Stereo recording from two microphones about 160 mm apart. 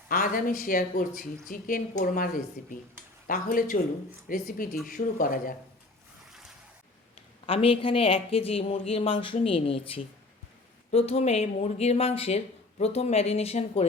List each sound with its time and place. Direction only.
0.1 s speech: 60° left (ahead or behind)
7.4 s speech: 35° left (ahead or behind)